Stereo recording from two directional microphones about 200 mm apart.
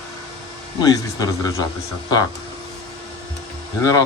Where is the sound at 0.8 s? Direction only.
20° left (ahead or behind).